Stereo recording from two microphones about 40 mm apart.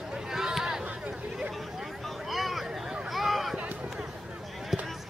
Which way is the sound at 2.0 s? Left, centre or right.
Centre.